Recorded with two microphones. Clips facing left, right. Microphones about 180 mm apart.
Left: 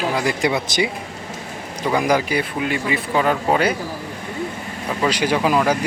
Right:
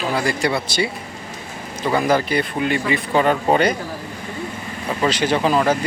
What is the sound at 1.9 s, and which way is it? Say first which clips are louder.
Speech: even; 10° left (ahead or behind).